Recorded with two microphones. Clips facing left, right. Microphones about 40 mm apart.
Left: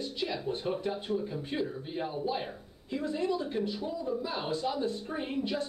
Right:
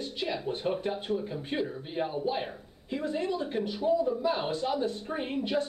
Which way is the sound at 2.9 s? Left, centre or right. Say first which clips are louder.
Even; right.